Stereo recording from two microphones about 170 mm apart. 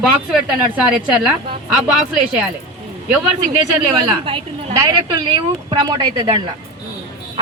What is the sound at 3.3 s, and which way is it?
A woman's voice, 20° right (ahead or behind).